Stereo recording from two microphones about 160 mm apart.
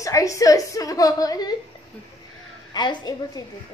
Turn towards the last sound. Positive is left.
turn(degrees=25)  # may be behind; listen again after turning